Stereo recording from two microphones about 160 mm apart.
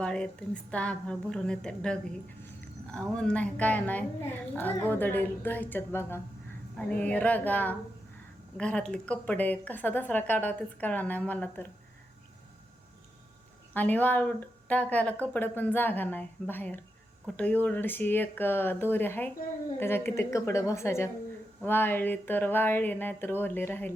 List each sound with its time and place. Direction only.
0.0 s a woman's voice: 5° left (ahead or behind)
13.7 s a woman's voice: 10° left (ahead or behind)